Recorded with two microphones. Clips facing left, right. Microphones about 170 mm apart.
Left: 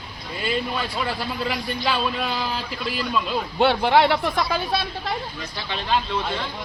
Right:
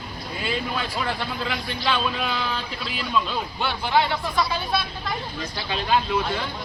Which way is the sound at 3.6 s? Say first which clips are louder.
Left 6 dB; 70° left (ahead or behind).